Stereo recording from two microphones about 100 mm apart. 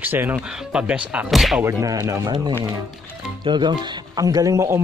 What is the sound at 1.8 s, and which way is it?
Speech, 35° right (ahead or behind).